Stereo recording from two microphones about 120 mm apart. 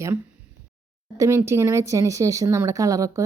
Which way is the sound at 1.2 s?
20° right (ahead or behind).